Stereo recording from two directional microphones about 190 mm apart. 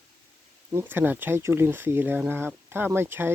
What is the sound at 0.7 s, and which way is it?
Speech, 10° right (ahead or behind).